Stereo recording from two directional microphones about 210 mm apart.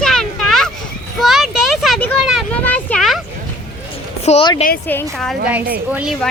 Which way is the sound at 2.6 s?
10° left (ahead or behind).